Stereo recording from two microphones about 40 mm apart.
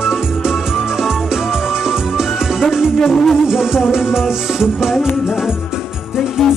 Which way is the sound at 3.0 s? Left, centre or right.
Centre.